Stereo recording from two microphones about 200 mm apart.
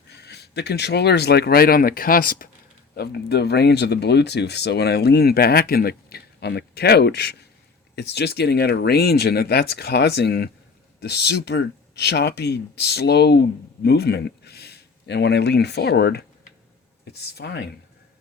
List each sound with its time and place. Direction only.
0.1 s speech: 55° left (ahead or behind)